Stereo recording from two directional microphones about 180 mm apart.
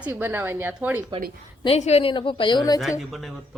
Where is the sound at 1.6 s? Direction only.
35° left (ahead or behind).